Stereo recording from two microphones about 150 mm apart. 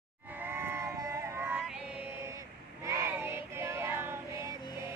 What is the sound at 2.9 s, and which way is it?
Child singing, 15° right (ahead or behind).